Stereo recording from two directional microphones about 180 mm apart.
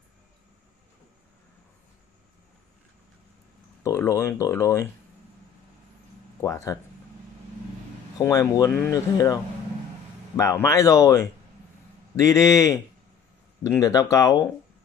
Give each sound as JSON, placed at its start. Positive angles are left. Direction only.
{"t": 3.8, "sound": "speech", "side_deg": 15}
{"t": 6.4, "sound": "speech", "side_deg": 15}
{"t": 8.2, "sound": "speech", "side_deg": 20}